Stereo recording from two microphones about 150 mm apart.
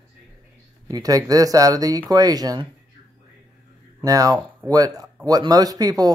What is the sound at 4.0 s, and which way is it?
Speech, 25° right (ahead or behind).